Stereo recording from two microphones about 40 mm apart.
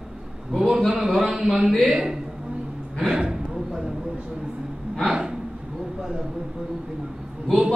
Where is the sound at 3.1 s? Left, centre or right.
Centre.